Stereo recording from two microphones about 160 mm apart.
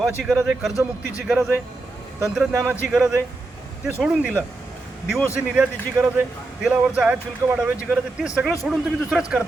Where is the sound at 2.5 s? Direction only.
15° right (ahead or behind).